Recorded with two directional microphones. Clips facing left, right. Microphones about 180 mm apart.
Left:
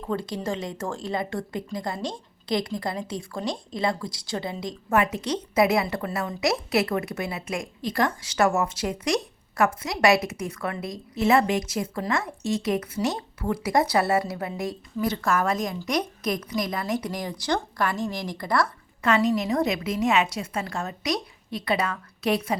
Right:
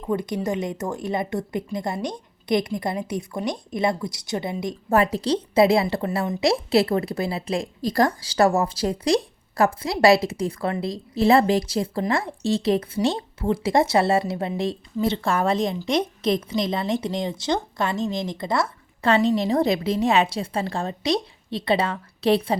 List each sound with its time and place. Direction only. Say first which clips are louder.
0.0 s a woman's voice: right 4 dB; 15° right (ahead or behind)
4.9 s a woman's voice: right 4 dB; 35° right (ahead or behind)